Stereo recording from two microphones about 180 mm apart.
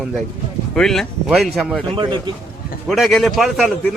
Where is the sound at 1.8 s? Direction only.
25° right (ahead or behind).